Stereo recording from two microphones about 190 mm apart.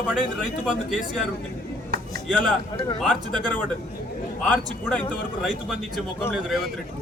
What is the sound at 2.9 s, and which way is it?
Speech, centre (ahead or behind).